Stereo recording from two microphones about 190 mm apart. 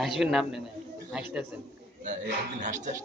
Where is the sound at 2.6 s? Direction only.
40° right (ahead or behind).